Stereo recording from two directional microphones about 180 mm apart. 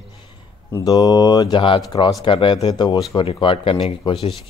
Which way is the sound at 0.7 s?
20° left (ahead or behind).